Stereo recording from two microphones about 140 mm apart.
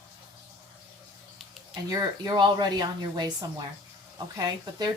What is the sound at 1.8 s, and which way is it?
Speech, 25° right (ahead or behind).